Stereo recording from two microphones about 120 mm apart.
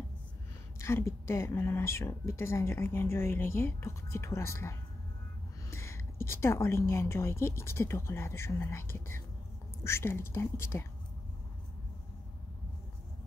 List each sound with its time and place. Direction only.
0.7 s speech: 25° left (ahead or behind)